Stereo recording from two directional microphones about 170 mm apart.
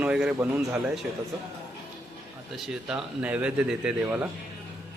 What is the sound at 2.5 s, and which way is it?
Speech, 5° right (ahead or behind).